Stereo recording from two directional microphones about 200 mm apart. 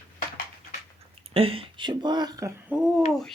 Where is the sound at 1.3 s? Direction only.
30° right (ahead or behind).